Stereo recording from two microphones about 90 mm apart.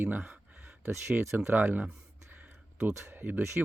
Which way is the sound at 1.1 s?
15° right (ahead or behind).